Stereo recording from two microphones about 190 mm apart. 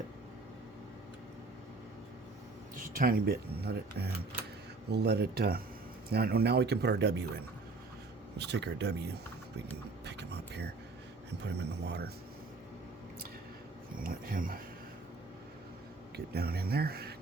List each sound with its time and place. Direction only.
2.7 s speech: 45° right (ahead or behind); by 7.3 s 60° right (ahead or behind)
8.4 s speech: 65° right (ahead or behind)
10.1 s vehicle: 60° right (ahead or behind)
11.4 s speech: 65° right (ahead or behind)
13.9 s speech: 50° right (ahead or behind)
16.1 s speech: 55° right (ahead or behind)